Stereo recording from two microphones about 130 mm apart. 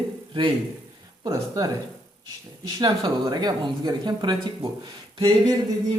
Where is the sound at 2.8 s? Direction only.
30° right (ahead or behind).